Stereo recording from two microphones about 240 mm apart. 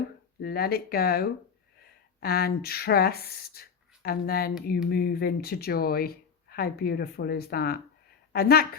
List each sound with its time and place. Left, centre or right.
0.4 s speech: left